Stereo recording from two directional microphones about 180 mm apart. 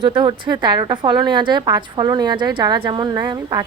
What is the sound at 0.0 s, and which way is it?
Speech, 25° right (ahead or behind).